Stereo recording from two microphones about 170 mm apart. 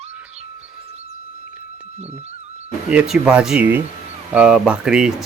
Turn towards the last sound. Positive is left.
turn(degrees=-5)  # may be behind; listen again after turning